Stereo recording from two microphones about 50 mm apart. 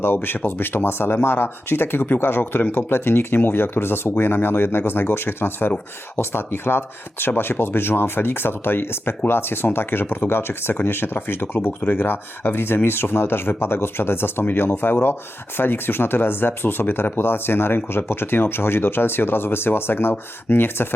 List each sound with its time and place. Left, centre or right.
0.0 s speech: left